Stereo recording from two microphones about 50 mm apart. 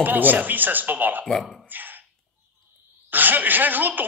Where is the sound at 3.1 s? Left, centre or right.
Right.